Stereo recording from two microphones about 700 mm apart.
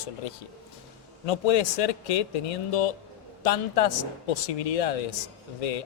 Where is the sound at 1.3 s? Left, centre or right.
Left.